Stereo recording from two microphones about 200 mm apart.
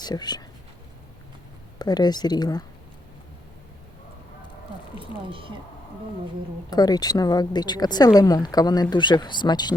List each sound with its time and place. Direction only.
0.0 s speech: 20° left (ahead or behind)
1.8 s speech: 20° left (ahead or behind)
6.7 s speech: 20° left (ahead or behind)